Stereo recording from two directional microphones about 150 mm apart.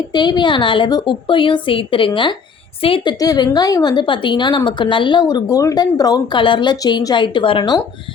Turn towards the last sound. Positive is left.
turn(degrees=30)  # may be behind; listen again after turning